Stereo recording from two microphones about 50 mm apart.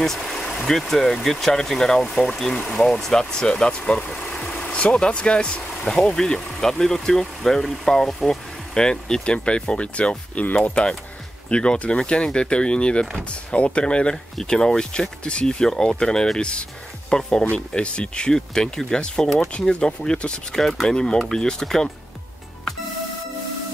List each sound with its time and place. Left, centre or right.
0.0 s speech: centre
3.8 s speech: centre
4.4 s vehicle: centre
4.7 s speech: left
14.1 s speech: centre
19.5 s speech: centre
20.5 s speech: centre